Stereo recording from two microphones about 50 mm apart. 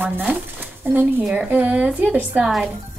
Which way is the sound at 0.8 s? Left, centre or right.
Right.